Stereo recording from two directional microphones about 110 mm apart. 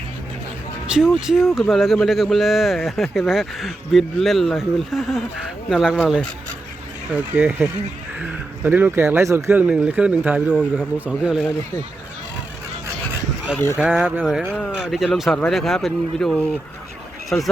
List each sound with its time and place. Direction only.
0.9 s speech: 5° right (ahead or behind)
13.7 s speech: 5° right (ahead or behind)